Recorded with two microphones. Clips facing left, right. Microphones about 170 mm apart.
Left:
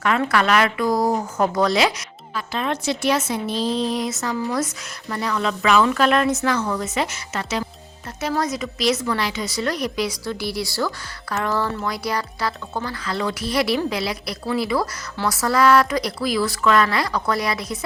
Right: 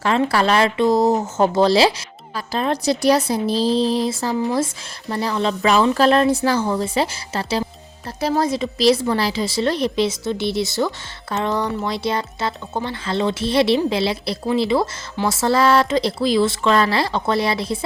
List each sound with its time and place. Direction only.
0.0 s a woman's voice: 30° right (ahead or behind)